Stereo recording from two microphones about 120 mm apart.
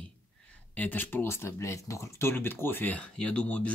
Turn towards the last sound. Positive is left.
turn(degrees=10)  # may be behind; listen again after turning